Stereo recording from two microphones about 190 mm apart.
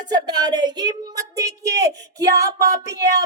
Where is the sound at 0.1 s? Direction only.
20° right (ahead or behind).